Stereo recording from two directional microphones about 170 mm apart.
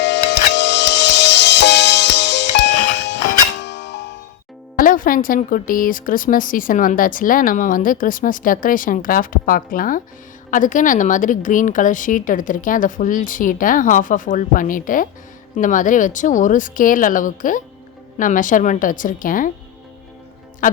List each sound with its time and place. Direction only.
0.0 s music: 90° left
4.8 s speech: 55° left (ahead or behind)